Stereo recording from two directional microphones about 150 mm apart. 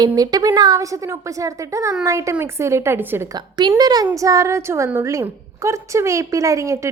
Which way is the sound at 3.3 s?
30° right (ahead or behind).